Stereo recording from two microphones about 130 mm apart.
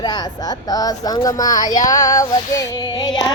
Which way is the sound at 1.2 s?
30° left (ahead or behind).